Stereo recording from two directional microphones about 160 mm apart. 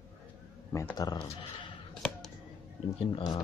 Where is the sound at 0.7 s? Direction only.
15° left (ahead or behind).